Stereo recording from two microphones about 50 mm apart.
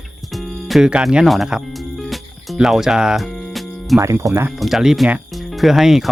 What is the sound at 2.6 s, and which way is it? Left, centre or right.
Speech, centre.